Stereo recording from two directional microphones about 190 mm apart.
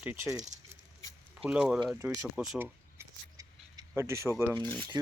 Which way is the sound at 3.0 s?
15° right (ahead or behind).